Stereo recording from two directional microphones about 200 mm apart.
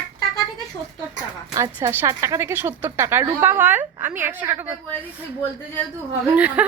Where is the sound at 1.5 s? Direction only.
15° right (ahead or behind).